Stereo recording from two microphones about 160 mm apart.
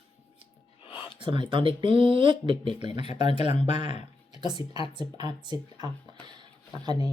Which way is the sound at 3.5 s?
45° left (ahead or behind).